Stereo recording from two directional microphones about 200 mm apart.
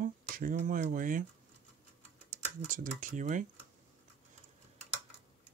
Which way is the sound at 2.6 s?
40° right (ahead or behind).